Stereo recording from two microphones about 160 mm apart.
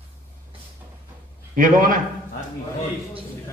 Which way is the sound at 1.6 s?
60° right (ahead or behind).